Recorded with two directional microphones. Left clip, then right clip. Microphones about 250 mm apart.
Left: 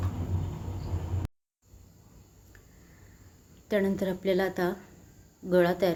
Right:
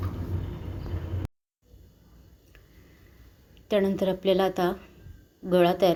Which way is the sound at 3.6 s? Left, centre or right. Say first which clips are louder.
Right 4 dB; centre.